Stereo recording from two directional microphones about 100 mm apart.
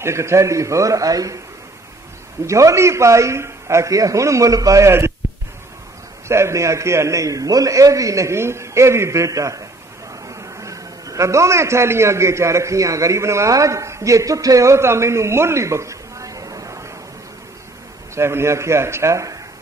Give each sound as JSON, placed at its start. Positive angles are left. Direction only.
{"t": 0.0, "sound": "a man's voice", "side_deg": -30}
{"t": 2.4, "sound": "a man's voice", "side_deg": -30}
{"t": 6.2, "sound": "a man's voice", "side_deg": -30}
{"t": 18.1, "sound": "a man's voice", "side_deg": -25}